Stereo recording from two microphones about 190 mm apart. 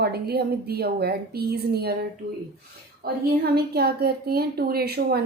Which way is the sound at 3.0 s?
55° right (ahead or behind).